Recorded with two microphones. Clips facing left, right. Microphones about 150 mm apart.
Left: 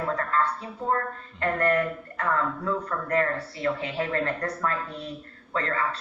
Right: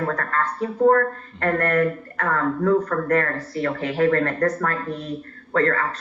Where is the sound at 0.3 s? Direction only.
50° right (ahead or behind).